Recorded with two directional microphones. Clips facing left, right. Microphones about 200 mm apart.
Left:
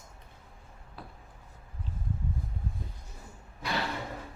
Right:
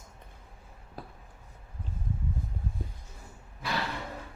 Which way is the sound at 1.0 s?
40° right (ahead or behind).